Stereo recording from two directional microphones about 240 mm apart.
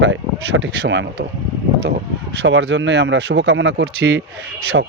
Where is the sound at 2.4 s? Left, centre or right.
Right.